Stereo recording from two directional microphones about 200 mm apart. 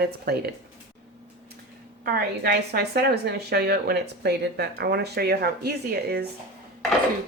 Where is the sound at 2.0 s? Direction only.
50° right (ahead or behind).